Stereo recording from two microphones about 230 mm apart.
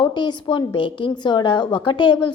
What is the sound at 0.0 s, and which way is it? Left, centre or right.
A woman's voice, centre.